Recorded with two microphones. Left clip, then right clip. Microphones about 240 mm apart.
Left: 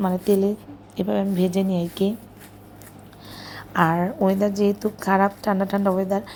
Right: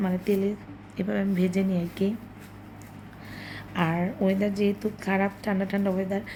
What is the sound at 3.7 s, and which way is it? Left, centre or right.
A woman's voice, centre.